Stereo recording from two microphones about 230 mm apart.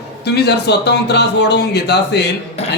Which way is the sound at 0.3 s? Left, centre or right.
Left.